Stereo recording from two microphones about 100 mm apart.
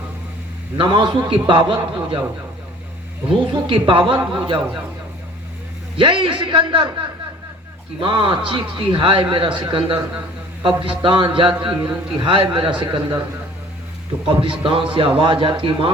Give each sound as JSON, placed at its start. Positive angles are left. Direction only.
{"t": 0.8, "sound": "a man's voice", "side_deg": -55}
{"t": 3.5, "sound": "a man's voice", "side_deg": -60}
{"t": 6.0, "sound": "a man's voice", "side_deg": -55}
{"t": 7.9, "sound": "a man's voice", "side_deg": -60}
{"t": 14.3, "sound": "a man's voice", "side_deg": -55}